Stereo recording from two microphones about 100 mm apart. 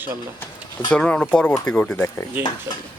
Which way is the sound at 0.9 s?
10° left (ahead or behind).